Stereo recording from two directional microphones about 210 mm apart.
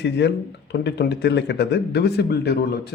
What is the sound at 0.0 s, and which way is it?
Speech, 55° left (ahead or behind).